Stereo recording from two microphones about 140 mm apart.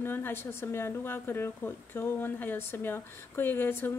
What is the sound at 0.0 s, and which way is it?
A woman's voice, 15° left (ahead or behind).